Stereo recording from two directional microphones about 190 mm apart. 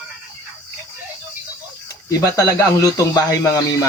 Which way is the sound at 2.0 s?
15° left (ahead or behind).